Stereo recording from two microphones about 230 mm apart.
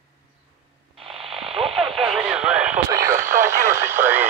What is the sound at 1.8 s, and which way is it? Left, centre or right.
Radio, centre.